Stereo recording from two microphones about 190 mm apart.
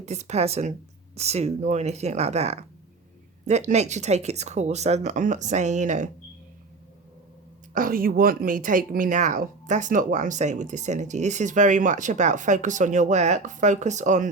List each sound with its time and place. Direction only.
0.0 s speech: 35° right (ahead or behind)
7.7 s speech: 45° right (ahead or behind)